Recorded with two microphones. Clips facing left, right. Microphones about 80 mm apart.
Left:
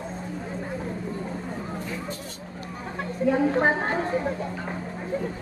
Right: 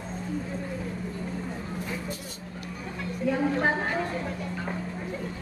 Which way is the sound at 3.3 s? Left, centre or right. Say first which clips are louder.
Left 4 dB; left.